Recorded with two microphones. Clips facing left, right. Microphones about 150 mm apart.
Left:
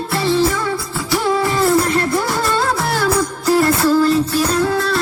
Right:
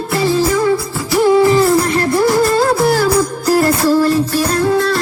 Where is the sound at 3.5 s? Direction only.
40° right (ahead or behind).